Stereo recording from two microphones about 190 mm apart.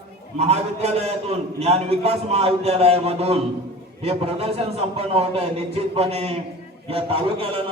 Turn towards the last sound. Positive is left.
turn(degrees=-30)  # may be behind; listen again after turning